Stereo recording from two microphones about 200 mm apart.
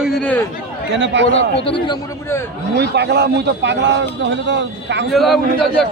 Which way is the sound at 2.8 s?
55° right (ahead or behind).